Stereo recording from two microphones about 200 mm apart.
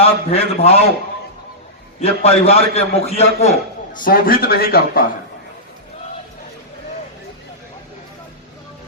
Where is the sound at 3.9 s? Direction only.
45° left (ahead or behind).